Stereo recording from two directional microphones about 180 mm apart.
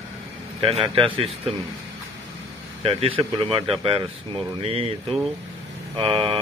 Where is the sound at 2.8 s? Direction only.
30° right (ahead or behind).